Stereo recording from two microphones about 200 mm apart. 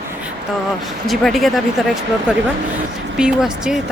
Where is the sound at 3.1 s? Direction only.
5° right (ahead or behind).